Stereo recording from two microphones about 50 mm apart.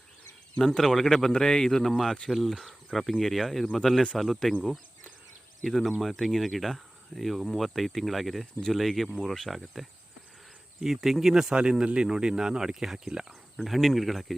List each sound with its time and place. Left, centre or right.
0.6 s speech: centre
5.6 s speech: centre
13.6 s speech: centre